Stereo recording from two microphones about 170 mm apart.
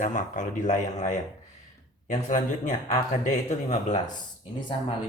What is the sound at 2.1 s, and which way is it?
Speech, 45° left (ahead or behind).